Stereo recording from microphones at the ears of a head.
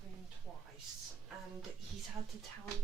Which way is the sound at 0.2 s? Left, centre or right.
Right.